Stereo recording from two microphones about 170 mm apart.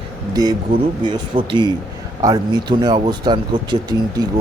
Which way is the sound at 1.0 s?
30° right (ahead or behind).